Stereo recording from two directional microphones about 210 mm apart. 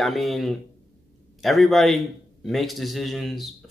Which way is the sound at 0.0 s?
Centre (ahead or behind).